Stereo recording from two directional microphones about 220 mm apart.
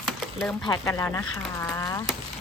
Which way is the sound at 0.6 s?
15° left (ahead or behind).